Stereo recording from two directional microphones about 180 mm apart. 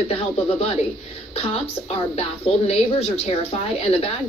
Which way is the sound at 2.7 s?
35° left (ahead or behind).